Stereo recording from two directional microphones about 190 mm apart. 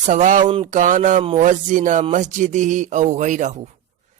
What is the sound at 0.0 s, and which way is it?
A man's voice, 40° right (ahead or behind).